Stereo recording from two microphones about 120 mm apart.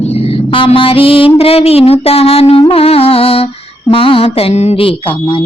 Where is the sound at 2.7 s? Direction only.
55° left (ahead or behind).